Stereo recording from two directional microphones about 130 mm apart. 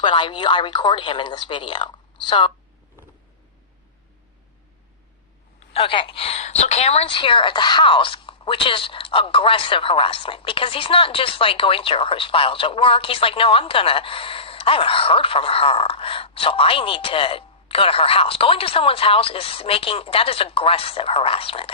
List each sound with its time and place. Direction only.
0.0 s speech: 40° left (ahead or behind)
5.5 s a woman's voice: 45° left (ahead or behind)